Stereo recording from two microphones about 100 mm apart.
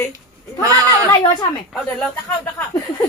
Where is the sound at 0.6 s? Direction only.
35° right (ahead or behind).